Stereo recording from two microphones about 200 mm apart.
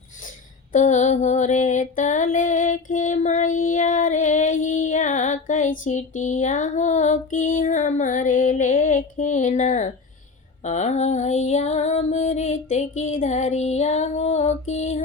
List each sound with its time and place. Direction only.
0.7 s female singing: 35° left (ahead or behind)